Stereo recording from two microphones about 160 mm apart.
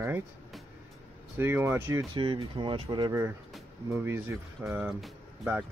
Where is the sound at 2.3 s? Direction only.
30° right (ahead or behind).